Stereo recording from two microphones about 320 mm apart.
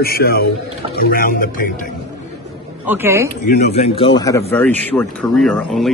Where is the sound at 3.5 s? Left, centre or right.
Left.